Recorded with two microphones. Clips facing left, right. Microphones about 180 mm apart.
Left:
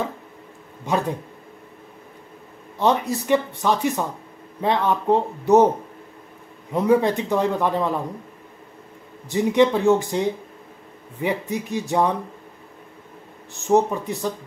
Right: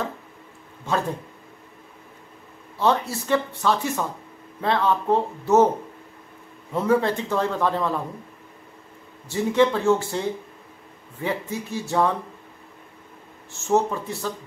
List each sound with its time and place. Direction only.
0.8 s a man's voice: 15° left (ahead or behind)
2.8 s a man's voice: 15° left (ahead or behind)
6.7 s a man's voice: 15° left (ahead or behind)
9.3 s a man's voice: 15° left (ahead or behind)
13.5 s a man's voice: 15° left (ahead or behind)